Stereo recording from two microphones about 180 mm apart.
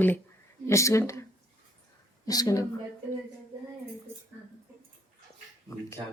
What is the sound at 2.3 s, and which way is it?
Speech, 20° left (ahead or behind).